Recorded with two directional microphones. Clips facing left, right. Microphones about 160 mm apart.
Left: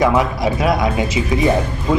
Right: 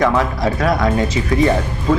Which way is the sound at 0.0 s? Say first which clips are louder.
Left 1 dB; 10° left (ahead or behind).